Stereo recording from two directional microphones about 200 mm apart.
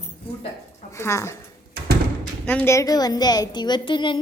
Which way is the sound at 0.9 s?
15° left (ahead or behind).